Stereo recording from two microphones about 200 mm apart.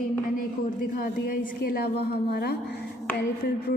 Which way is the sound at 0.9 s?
45° left (ahead or behind).